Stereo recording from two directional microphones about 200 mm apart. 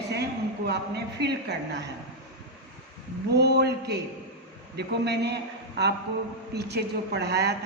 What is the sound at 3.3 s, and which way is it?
A woman's voice, 55° right (ahead or behind).